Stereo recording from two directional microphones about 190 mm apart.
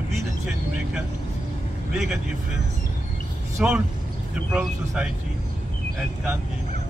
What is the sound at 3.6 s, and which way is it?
Speech, 5° right (ahead or behind).